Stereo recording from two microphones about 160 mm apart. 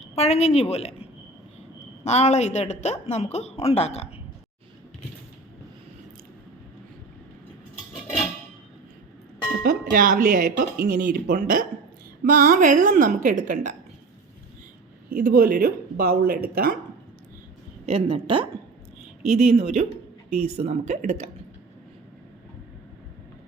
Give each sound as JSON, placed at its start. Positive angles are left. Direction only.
{"t": 0.0, "sound": "a woman's voice", "side_deg": 40}
{"t": 2.0, "sound": "a woman's voice", "side_deg": 45}
{"t": 9.6, "sound": "speech", "side_deg": -60}
{"t": 15.1, "sound": "speech", "side_deg": -60}
{"t": 17.8, "sound": "speech", "side_deg": -35}